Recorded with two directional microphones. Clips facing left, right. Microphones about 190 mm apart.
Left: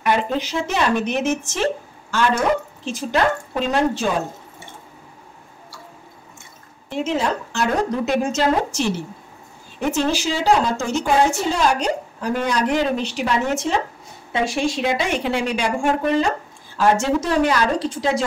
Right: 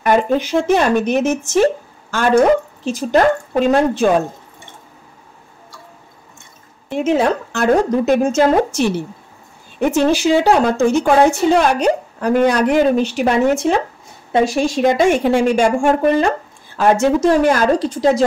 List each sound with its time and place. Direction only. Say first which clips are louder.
0.0 s speech: right 6 dB; 45° right (ahead or behind)
6.9 s a woman's voice: right 6 dB; 55° right (ahead or behind)
14.3 s speech: right 6 dB; 40° right (ahead or behind)